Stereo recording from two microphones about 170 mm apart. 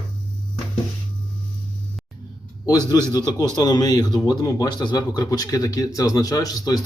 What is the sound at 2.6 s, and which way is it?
Speech, 25° left (ahead or behind).